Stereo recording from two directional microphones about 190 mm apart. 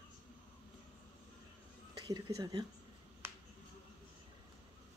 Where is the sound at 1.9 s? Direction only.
20° right (ahead or behind).